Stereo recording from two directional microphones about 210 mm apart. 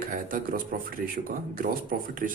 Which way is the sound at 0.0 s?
40° right (ahead or behind).